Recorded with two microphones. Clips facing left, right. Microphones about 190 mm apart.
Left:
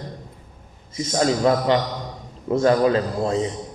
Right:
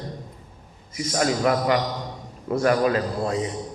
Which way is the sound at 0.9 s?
25° left (ahead or behind).